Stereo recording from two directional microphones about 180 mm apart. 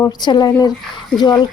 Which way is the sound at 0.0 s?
25° left (ahead or behind).